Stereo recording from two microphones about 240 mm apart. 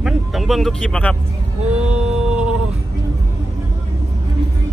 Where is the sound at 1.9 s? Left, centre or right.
Centre.